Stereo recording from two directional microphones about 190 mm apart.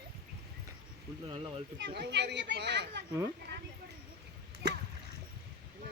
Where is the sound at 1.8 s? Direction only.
65° right (ahead or behind).